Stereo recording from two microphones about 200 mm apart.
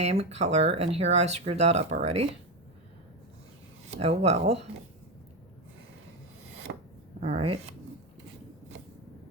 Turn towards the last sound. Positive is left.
turn(degrees=-30)  # may be behind; listen again after turning